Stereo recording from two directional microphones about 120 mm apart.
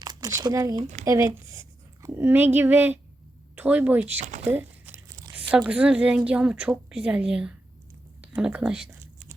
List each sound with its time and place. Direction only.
0.0 s speech: 35° right (ahead or behind)
0.8 s speech: 80° right
1.0 s a woman's voice: 25° right (ahead or behind)
4.4 s a sound: 15° right (ahead or behind)
5.3 s a woman's voice: 10° right (ahead or behind)